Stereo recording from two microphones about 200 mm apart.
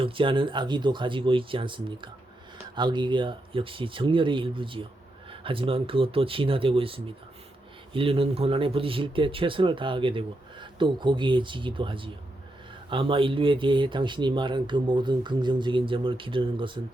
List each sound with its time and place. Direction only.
0.0 s speech: 25° right (ahead or behind)